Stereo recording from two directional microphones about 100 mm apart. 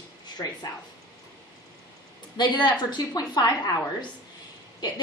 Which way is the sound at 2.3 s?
45° left (ahead or behind).